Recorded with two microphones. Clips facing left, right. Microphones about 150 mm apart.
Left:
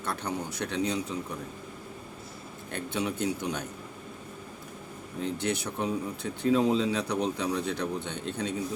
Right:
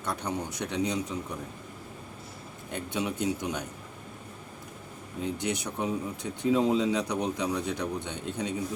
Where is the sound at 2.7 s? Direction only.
15° right (ahead or behind).